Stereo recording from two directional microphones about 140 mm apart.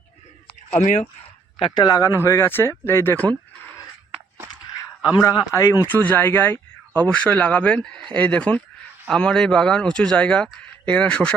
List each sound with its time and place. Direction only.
0.8 s speech: 60° left (ahead or behind)
1.5 s speech: 35° left (ahead or behind); by 3.2 s 15° left (ahead or behind)
5.2 s speech: 25° left (ahead or behind); by 11.3 s 10° left (ahead or behind)